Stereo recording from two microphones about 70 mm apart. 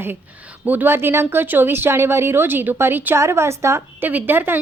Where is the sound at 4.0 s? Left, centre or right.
Right.